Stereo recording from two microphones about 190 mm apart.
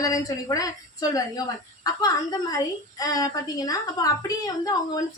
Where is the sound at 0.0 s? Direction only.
20° left (ahead or behind).